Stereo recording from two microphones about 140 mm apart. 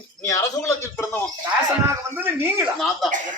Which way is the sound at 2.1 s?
15° right (ahead or behind).